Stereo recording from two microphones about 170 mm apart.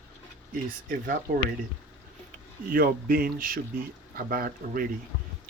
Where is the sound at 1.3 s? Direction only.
60° right (ahead or behind).